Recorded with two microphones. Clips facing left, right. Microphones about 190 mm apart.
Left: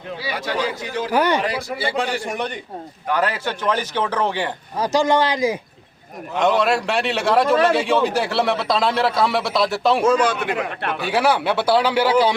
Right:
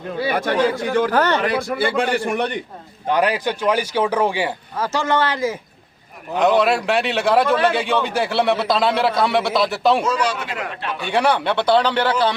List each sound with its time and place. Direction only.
0.2 s speech: 55° right (ahead or behind)
1.1 s a man's voice: 10° left (ahead or behind)
1.5 s a man's voice: 55° right (ahead or behind)
3.1 s speech: 15° right (ahead or behind)
4.8 s a man's voice: 15° left (ahead or behind)
6.3 s a man's voice: centre (ahead or behind)
10.0 s speech: 55° left (ahead or behind)
11.0 s a man's voice: 5° left (ahead or behind)